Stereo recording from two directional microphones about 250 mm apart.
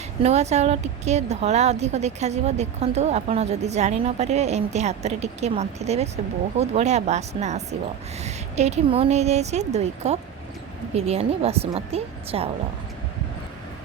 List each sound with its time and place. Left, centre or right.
0.2 s a woman's voice: right